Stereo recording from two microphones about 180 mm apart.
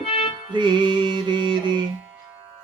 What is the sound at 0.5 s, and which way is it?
Music, 25° right (ahead or behind).